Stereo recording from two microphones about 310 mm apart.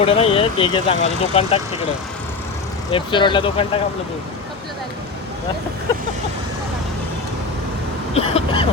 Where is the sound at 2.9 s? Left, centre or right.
Centre.